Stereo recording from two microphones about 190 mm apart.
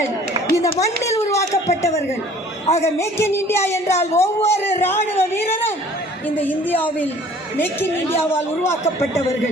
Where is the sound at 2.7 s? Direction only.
35° left (ahead or behind).